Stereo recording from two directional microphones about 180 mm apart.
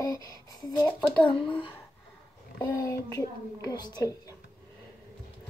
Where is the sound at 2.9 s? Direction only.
20° left (ahead or behind).